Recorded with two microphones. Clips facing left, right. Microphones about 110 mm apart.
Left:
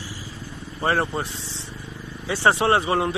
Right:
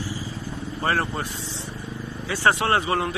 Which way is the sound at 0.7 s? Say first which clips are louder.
Left 2 dB; 10° left (ahead or behind).